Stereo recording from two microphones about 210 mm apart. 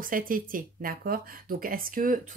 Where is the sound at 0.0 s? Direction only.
40° right (ahead or behind).